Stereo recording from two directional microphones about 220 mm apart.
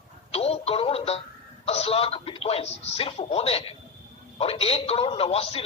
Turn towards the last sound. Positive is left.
turn(degrees=25)  # may be behind; listen again after turning